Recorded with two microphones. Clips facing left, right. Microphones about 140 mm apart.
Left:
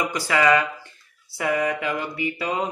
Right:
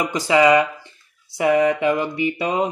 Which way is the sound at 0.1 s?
20° right (ahead or behind).